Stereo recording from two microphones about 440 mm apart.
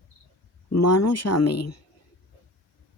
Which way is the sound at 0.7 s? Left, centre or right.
Left.